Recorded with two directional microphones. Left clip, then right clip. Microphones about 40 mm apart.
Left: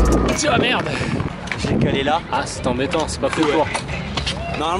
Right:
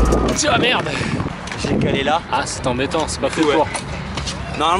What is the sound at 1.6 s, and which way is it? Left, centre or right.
Speech, centre.